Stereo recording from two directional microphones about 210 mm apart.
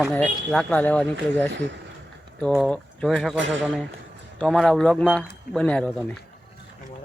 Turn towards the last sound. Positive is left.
turn(degrees=5)  # may be behind; listen again after turning